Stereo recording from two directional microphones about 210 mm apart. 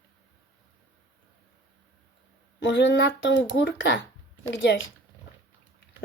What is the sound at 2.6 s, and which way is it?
Speech, 60° left (ahead or behind).